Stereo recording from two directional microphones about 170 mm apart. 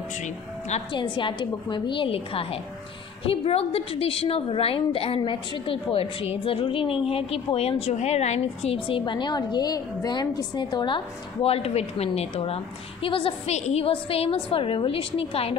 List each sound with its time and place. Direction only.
0.9 s a woman's voice: 30° left (ahead or behind)
11.4 s a woman's voice: 35° left (ahead or behind)